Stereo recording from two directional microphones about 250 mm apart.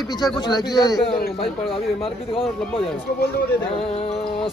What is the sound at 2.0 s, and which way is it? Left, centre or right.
Speech, left.